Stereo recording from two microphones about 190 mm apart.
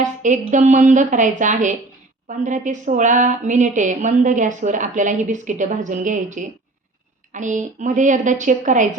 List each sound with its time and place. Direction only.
0.0 s speech: 40° right (ahead or behind)